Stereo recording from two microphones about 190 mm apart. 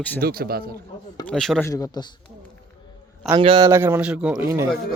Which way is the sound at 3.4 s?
30° right (ahead or behind).